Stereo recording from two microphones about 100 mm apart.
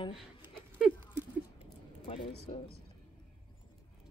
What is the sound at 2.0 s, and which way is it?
Speech, 70° left (ahead or behind).